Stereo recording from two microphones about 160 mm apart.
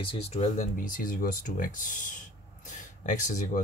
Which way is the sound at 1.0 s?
60° left (ahead or behind).